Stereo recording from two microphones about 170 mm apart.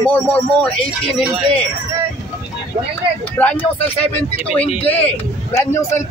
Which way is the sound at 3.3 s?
10° left (ahead or behind).